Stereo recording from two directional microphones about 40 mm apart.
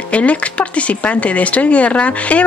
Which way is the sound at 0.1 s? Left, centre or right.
Left.